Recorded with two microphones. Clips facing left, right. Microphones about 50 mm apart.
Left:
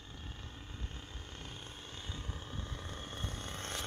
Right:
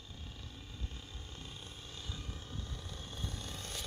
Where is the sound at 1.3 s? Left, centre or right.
Left.